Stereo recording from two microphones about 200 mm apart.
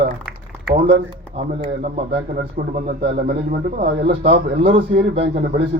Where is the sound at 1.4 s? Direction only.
30° right (ahead or behind).